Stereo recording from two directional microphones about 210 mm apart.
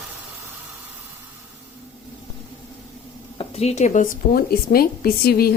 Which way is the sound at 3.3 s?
30° left (ahead or behind).